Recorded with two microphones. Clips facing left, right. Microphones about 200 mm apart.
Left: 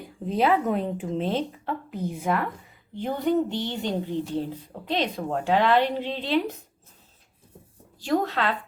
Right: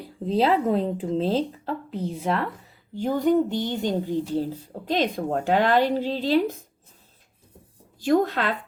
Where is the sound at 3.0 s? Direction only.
45° right (ahead or behind).